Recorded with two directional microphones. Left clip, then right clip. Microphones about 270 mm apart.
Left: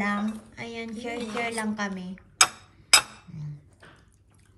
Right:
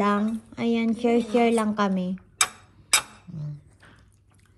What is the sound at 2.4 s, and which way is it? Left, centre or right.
Tick-tock, centre.